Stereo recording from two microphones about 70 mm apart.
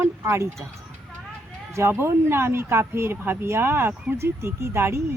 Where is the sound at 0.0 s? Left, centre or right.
Right.